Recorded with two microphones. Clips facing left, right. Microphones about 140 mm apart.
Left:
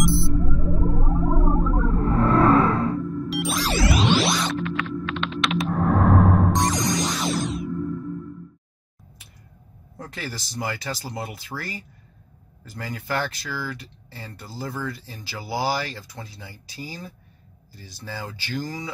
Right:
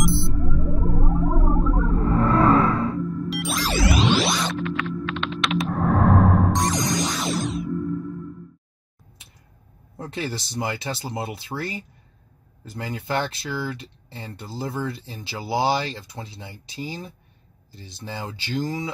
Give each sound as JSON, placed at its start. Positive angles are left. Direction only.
{"t": 0.0, "sound": "sonar", "side_deg": 0}
{"t": 0.9, "sound": "whale vocalization", "side_deg": 0}
{"t": 9.9, "sound": "speech", "side_deg": -25}